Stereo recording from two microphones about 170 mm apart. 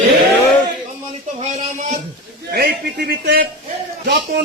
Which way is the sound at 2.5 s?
65° right (ahead or behind).